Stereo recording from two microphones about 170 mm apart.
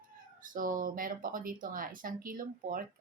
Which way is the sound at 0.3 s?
55° right (ahead or behind).